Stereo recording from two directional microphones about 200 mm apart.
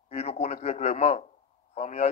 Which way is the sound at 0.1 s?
35° left (ahead or behind).